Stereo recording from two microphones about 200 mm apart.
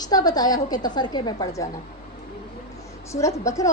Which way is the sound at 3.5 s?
15° left (ahead or behind).